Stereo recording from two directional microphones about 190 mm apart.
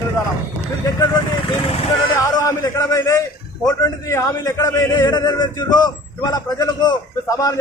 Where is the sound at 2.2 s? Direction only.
20° left (ahead or behind).